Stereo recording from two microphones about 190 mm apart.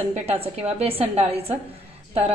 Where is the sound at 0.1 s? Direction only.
35° right (ahead or behind).